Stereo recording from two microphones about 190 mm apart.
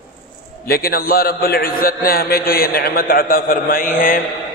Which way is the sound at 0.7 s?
50° left (ahead or behind).